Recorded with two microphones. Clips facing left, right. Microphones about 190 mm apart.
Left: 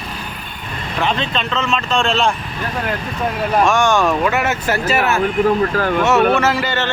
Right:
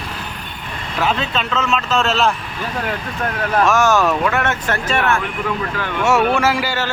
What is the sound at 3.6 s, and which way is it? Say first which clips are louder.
Speech: right 1 dB; 5° right (ahead or behind).